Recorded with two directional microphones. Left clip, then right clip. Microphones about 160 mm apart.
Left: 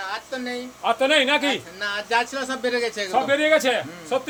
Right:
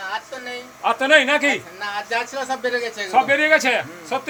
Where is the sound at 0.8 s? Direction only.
20° left (ahead or behind).